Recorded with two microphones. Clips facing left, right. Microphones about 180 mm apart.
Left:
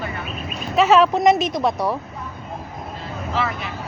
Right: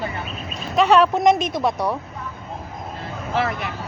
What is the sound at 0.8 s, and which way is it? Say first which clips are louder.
Speech: left 1 dB; centre (ahead or behind).